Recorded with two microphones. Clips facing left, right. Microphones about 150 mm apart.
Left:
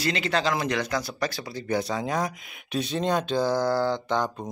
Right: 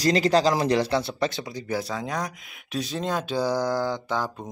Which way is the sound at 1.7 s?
Centre (ahead or behind).